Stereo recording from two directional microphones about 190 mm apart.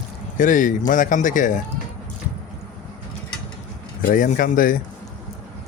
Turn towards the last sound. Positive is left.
turn(degrees=45)  # may be behind; listen again after turning